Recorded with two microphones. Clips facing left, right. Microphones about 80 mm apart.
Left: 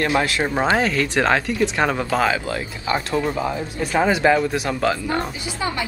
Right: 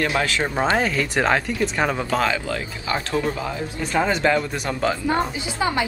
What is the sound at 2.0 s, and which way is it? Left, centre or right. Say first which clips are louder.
Speech: left 2 dB; centre.